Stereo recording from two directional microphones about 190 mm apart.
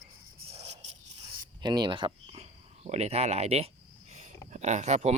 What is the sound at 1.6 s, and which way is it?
Speech, 20° right (ahead or behind).